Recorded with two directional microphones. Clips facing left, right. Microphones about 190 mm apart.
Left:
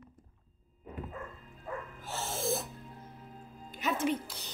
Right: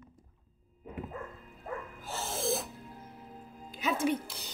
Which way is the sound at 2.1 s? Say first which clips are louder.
Right 1 dB; centre (ahead or behind).